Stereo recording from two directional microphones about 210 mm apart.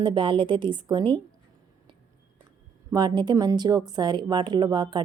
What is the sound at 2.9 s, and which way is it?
Speech, 20° right (ahead or behind).